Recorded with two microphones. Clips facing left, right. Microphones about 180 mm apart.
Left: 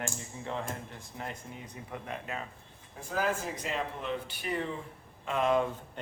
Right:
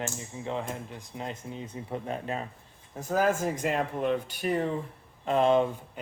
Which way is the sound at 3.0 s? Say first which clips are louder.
Right 6 dB; 45° right (ahead or behind).